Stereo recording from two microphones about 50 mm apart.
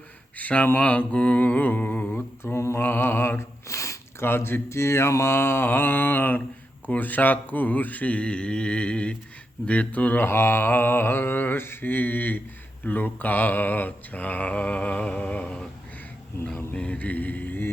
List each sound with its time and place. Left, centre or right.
0.3 s speech: left
0.8 s mantra: left
2.4 s mantra: left
2.8 s mantra: left
3.7 s a sound: left
4.2 s mantra: left
10.2 s mantra: left
16.7 s mantra: left